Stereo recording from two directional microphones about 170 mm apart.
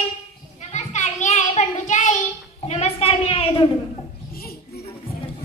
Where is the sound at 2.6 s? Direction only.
40° left (ahead or behind).